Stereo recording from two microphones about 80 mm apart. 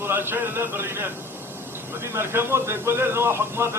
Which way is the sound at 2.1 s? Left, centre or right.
Right.